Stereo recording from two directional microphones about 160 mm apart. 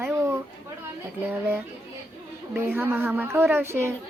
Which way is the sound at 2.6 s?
10° right (ahead or behind).